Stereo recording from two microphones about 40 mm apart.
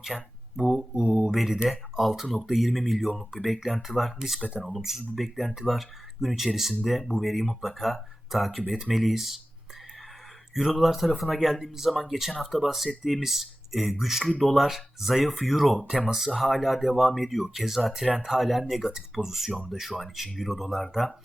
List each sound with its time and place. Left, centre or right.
0.0 s speech: centre
10.5 s speech: centre
18.1 s speech: centre
18.3 s speech: centre
18.8 s speech: centre
19.1 s speech: centre